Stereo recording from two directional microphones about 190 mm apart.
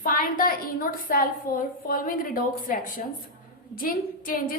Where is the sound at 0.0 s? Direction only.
45° left (ahead or behind).